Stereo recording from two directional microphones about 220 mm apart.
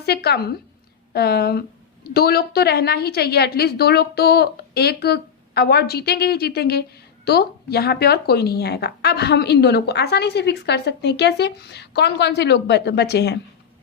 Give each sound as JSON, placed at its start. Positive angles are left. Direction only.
{"t": 0.0, "sound": "speech", "side_deg": 45}